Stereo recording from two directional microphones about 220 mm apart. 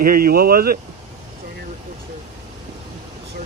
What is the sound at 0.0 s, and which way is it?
Speech, 40° right (ahead or behind).